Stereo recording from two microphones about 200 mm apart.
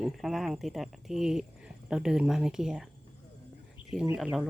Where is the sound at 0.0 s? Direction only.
Centre (ahead or behind).